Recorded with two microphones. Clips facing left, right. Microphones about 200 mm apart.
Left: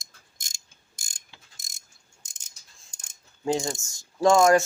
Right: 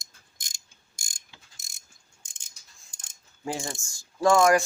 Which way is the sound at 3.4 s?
20° left (ahead or behind).